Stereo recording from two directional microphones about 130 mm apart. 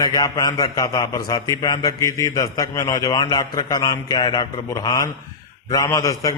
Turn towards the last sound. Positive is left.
turn(degrees=25)  # may be behind; listen again after turning